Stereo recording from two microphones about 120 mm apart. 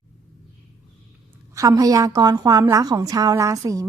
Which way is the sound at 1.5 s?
30° right (ahead or behind).